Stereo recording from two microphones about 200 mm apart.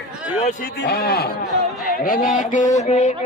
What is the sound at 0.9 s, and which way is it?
A man's voice, 50° left (ahead or behind).